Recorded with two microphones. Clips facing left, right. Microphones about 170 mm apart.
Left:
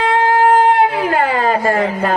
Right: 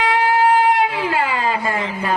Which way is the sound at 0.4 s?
50° left (ahead or behind).